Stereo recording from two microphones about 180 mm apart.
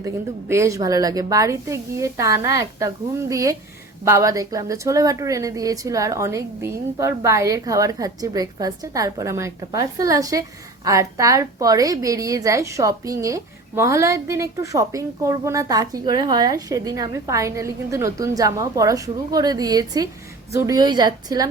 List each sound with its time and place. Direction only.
0.0 s a woman's voice: 15° right (ahead or behind)